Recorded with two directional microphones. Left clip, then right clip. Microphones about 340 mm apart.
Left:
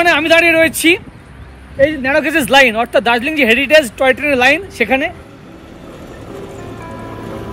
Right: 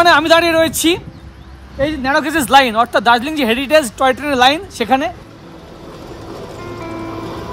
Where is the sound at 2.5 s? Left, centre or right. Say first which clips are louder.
Even; centre.